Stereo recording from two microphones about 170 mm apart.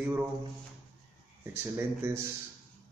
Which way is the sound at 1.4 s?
15° right (ahead or behind).